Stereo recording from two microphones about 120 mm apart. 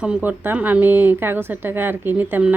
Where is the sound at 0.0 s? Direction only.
10° right (ahead or behind).